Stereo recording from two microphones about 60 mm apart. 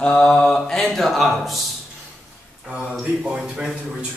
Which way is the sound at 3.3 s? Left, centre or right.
Centre.